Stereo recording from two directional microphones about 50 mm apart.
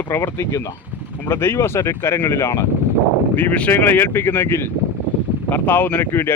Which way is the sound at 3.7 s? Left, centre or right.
Left.